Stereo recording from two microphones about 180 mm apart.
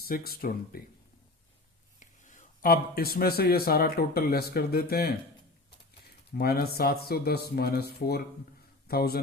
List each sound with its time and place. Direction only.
0.0 s speech: 55° left (ahead or behind)
2.0 s speech: 45° left (ahead or behind)
6.3 s speech: 60° left (ahead or behind)
8.9 s speech: 60° left (ahead or behind)